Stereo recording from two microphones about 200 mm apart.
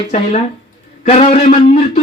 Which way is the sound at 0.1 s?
35° left (ahead or behind).